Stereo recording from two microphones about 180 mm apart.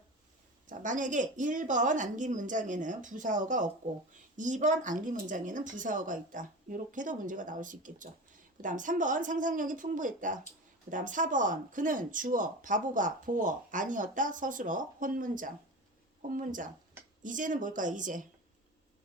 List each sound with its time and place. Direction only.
0.7 s speech: 45° right (ahead or behind)